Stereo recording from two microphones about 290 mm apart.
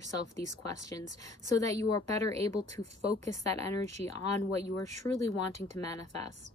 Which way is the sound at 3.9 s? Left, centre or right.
Right.